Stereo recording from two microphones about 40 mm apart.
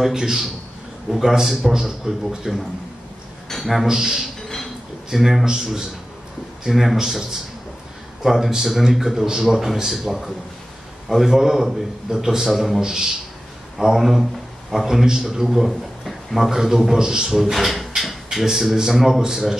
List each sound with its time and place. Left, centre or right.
0.0 s a man's voice: centre
3.8 s a man's voice: centre
12.8 s a man's voice: centre
16.4 s a man's voice: centre
17.5 s speech: centre